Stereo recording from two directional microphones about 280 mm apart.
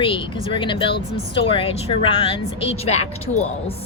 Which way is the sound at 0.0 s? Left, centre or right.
Centre.